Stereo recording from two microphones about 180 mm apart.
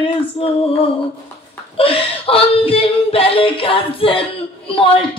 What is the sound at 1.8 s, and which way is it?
Speech, 30° left (ahead or behind).